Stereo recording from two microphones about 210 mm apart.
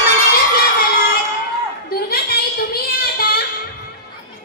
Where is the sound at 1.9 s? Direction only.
45° left (ahead or behind).